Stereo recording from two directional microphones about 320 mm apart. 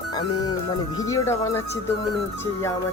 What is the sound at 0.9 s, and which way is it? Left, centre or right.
Speech, centre.